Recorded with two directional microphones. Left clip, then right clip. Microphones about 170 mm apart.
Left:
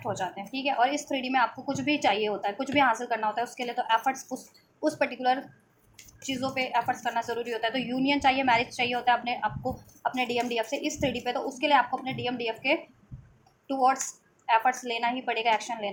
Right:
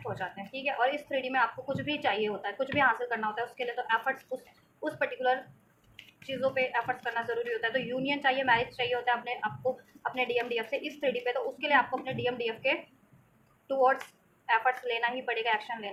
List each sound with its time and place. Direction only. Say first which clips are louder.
0.0 s a woman's voice: left 5 dB; 45° left (ahead or behind)